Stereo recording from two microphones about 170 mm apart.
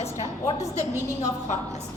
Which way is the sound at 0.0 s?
40° left (ahead or behind).